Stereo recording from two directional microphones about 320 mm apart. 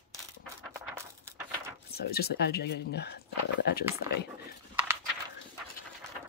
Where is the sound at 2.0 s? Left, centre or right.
Left.